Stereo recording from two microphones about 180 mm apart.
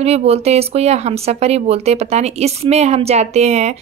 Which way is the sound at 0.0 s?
35° right (ahead or behind).